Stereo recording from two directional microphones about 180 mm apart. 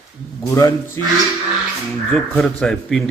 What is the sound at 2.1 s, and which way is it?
Speech, 5° left (ahead or behind).